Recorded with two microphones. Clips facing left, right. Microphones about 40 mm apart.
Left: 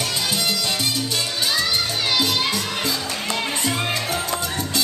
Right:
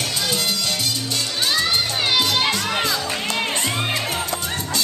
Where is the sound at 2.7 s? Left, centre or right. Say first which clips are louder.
Right 3 dB; right.